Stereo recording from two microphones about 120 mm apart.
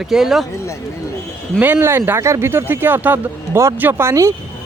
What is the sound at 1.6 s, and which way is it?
Speech, 15° right (ahead or behind).